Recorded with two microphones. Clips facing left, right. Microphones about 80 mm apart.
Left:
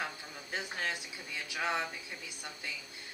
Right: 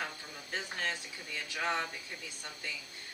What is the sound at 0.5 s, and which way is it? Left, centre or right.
Speech, centre.